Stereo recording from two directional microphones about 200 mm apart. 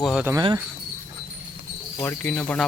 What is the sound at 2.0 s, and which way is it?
Speech, 10° left (ahead or behind).